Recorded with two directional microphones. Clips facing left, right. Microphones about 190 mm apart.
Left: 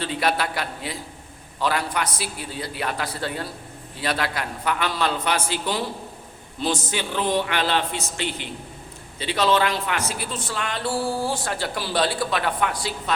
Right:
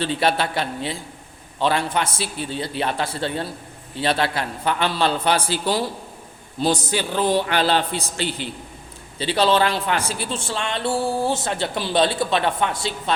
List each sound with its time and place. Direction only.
0.0 s a man's voice: 30° right (ahead or behind)